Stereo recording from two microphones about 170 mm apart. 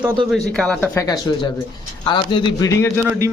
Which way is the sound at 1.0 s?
20° left (ahead or behind).